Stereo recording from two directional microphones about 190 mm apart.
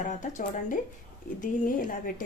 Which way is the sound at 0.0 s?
40° left (ahead or behind).